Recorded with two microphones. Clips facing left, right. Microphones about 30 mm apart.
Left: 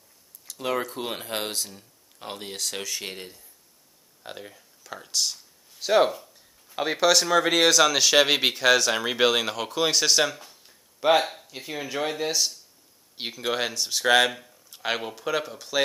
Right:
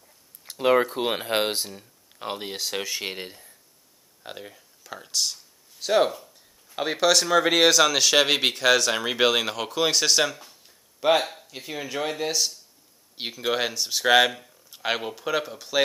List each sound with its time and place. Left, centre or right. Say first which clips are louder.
0.5 s speech: right 8 dB; right
4.2 s speech: right 1 dB; centre